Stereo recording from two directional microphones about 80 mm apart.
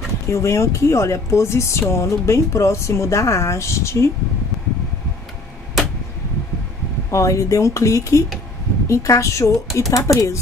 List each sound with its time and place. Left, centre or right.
0.3 s speech: left
7.1 s speech: left